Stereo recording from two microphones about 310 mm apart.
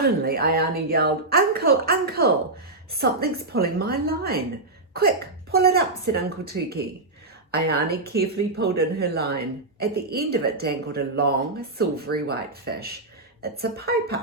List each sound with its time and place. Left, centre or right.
0.0 s speech: right